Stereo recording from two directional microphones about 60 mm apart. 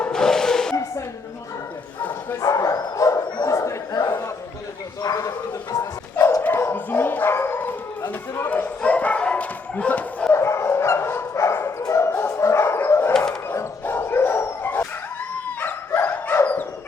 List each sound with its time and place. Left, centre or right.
0.0 s a sound: centre
2.4 s bow-wow: left
5.0 s a sound: left
6.4 s dog: left
8.4 s bow-wow: left
10.3 s dog: left
11.8 s dog: left
12.0 s dog: left
16.0 s dog: left